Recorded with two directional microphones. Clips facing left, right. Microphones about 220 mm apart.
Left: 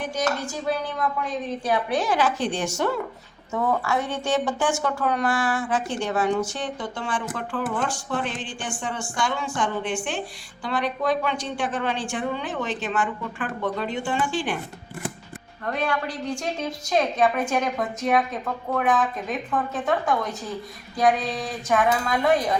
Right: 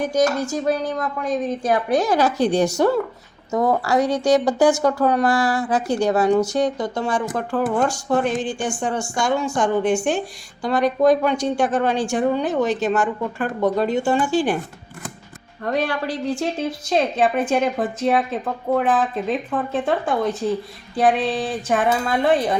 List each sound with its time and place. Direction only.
0.0 s a woman's voice: 45° right (ahead or behind)
15.7 s a woman's voice: 35° right (ahead or behind)